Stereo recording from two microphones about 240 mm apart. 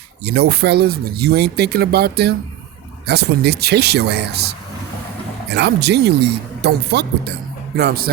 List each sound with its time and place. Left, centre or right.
0.3 s speech: right